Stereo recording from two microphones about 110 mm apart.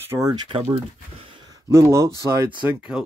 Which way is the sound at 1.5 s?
25° right (ahead or behind).